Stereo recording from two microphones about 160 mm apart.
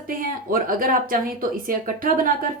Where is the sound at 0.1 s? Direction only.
60° right (ahead or behind).